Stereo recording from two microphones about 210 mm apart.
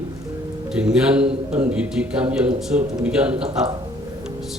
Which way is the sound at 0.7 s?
5° right (ahead or behind).